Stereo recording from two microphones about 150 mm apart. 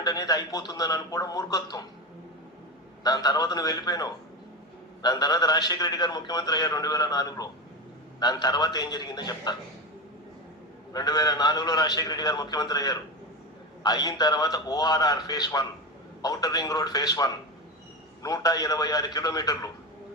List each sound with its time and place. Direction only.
0.0 s a man's voice: 25° left (ahead or behind)
3.0 s a man's voice: 25° left (ahead or behind)
10.9 s a man's voice: 25° left (ahead or behind)